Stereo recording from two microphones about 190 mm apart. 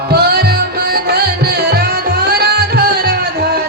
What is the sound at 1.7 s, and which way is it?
Music, 55° right (ahead or behind).